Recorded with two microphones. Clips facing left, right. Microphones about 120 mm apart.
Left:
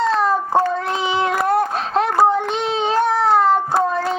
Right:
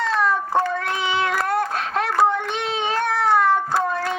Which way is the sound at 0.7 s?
20° left (ahead or behind).